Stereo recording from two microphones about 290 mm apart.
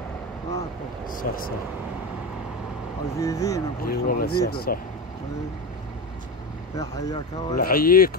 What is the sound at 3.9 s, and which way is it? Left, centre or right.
Speech, left.